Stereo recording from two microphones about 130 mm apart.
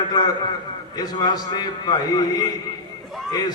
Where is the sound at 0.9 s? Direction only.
30° left (ahead or behind).